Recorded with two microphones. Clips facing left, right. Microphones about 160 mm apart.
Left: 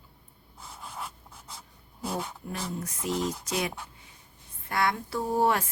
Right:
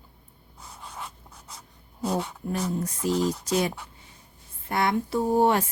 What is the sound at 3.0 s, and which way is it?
Speech, 35° right (ahead or behind).